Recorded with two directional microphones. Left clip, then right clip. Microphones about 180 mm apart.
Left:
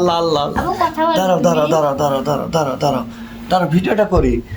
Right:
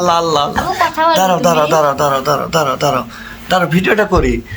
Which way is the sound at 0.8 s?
30° right (ahead or behind).